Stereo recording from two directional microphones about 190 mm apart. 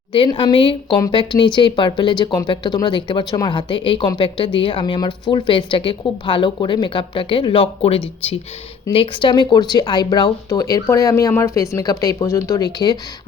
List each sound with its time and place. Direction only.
0.1 s speech: 25° left (ahead or behind)